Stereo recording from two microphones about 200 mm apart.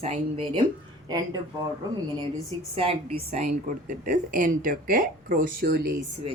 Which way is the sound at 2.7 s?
30° right (ahead or behind).